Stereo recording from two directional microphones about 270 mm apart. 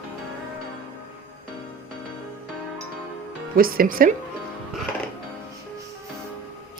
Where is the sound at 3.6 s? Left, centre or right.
Right.